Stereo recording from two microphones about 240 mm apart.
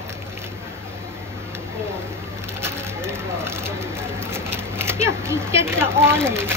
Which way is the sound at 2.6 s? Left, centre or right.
Centre.